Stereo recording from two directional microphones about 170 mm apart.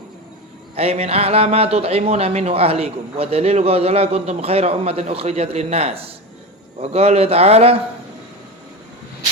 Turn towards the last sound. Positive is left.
turn(degrees=-35)  # may be behind; listen again after turning